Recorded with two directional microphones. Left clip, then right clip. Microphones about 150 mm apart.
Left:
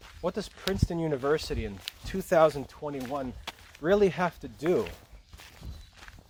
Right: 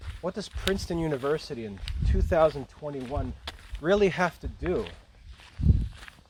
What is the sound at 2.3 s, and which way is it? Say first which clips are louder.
Speech: left 1 dB; 5° right (ahead or behind).